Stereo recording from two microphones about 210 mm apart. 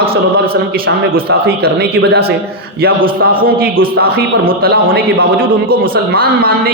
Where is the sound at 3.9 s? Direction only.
45° right (ahead or behind).